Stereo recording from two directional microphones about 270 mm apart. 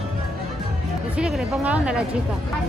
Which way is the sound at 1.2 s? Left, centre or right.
Centre.